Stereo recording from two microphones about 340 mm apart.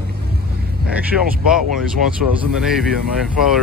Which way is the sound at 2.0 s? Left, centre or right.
Centre.